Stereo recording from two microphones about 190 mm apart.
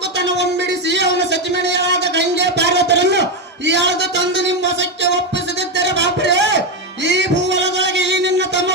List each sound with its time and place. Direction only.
0.2 s music: 65° right (ahead or behind)
3.7 s a sound: 70° right (ahead or behind)
7.0 s music: 65° right (ahead or behind)